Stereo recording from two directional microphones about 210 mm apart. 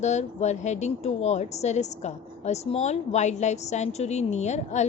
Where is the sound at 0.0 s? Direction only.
35° left (ahead or behind).